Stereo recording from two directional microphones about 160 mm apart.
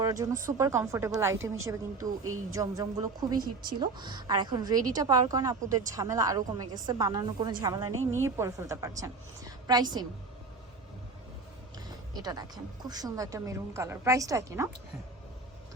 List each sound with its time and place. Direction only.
0.0 s a woman's voice: 20° right (ahead or behind)
12.1 s a woman's voice: 25° right (ahead or behind)